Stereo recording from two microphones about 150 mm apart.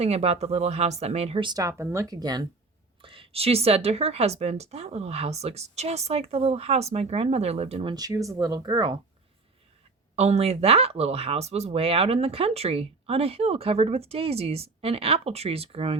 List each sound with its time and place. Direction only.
0.0 s a woman's voice: 45° right (ahead or behind)
7.9 s speech: 25° right (ahead or behind)
10.2 s speech: 45° right (ahead or behind)